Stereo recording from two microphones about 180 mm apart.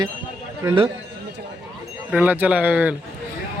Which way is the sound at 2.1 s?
10° right (ahead or behind).